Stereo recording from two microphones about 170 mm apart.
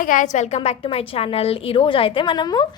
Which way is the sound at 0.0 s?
50° left (ahead or behind).